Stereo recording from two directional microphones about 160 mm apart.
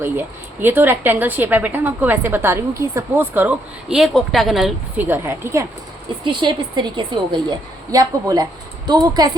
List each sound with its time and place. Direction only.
0.0 s speech: 15° right (ahead or behind)
4.9 s speech: 15° right (ahead or behind)
6.2 s a woman's voice: 30° right (ahead or behind)